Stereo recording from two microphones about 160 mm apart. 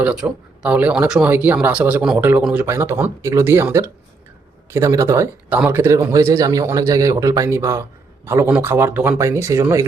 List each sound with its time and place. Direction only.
0.0 s speech: 5° right (ahead or behind)